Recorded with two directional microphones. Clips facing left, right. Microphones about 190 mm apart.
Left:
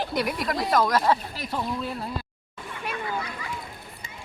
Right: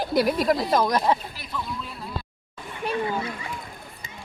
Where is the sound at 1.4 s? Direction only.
40° left (ahead or behind).